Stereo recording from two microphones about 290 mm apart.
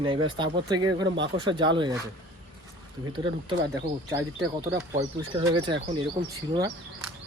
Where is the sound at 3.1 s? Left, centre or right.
Centre.